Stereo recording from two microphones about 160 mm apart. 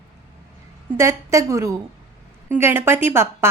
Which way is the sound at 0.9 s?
20° right (ahead or behind).